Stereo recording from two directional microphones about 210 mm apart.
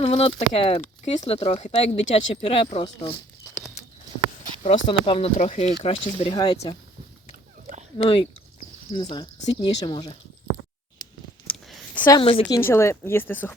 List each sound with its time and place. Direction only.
0.0 s speech: 25° left (ahead or behind)
4.6 s speech: 30° left (ahead or behind)
6.3 s speech: 20° left (ahead or behind)
7.9 s speech: 25° left (ahead or behind)
11.4 s a sound: 5° left (ahead or behind)
12.1 s speech: 25° left (ahead or behind)
12.5 s speech: 10° left (ahead or behind)